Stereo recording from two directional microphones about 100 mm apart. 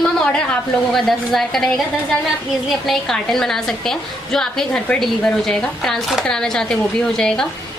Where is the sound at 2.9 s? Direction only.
5° left (ahead or behind).